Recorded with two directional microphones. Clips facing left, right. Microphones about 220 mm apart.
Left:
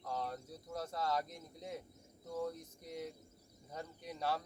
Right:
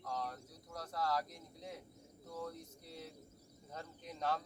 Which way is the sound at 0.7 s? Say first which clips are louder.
Left 1 dB; 25° left (ahead or behind).